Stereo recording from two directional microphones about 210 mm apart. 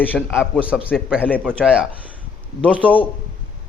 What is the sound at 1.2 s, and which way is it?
Speech, 5° left (ahead or behind).